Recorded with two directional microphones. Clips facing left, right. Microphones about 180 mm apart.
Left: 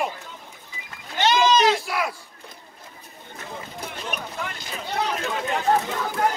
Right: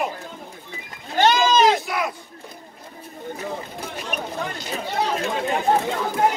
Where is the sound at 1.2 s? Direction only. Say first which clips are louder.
Right 2 dB; 50° right (ahead or behind).